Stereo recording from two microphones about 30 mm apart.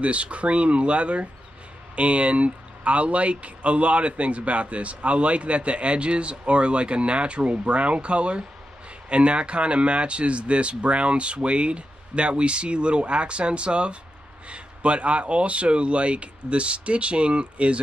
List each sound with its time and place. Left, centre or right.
0.0 s speech: right